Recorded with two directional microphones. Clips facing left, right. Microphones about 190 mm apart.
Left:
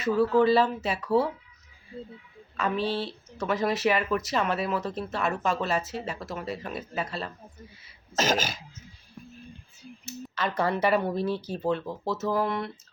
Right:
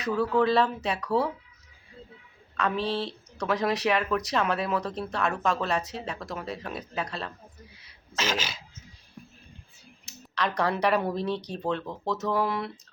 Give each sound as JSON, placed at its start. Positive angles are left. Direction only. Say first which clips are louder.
{"t": 0.3, "sound": "speech", "louder": "left 1 dB", "side_deg": 5}
{"t": 2.6, "sound": "speech", "louder": "even", "side_deg": 5}
{"t": 8.1, "sound": "throat clearing", "louder": "left 4 dB", "side_deg": 45}
{"t": 10.1, "sound": "speech", "louder": "even", "side_deg": 0}